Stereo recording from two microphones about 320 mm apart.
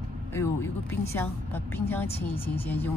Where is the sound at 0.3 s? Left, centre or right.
Centre.